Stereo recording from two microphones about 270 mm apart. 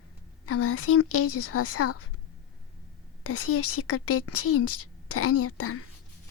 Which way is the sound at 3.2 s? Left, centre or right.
Left.